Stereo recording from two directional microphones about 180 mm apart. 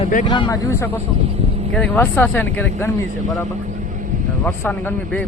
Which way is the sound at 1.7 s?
10° left (ahead or behind).